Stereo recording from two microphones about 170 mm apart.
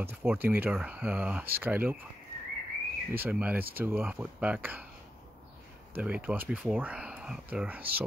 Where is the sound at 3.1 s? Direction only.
10° right (ahead or behind).